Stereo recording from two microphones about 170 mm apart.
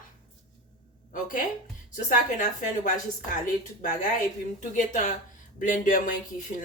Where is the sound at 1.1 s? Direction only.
55° left (ahead or behind).